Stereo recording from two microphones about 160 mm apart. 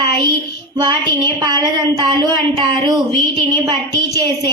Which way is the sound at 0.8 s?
25° right (ahead or behind).